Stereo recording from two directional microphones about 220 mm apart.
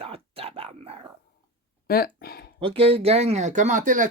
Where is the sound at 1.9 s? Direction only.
45° left (ahead or behind).